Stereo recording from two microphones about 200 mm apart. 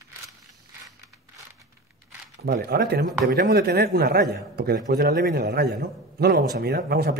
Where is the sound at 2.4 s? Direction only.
50° right (ahead or behind).